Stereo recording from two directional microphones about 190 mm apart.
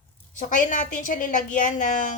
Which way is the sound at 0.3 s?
40° left (ahead or behind).